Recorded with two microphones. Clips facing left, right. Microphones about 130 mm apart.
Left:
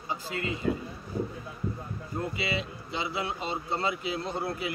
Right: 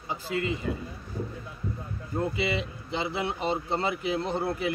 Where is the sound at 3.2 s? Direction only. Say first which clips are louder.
Right 4 dB; 20° right (ahead or behind).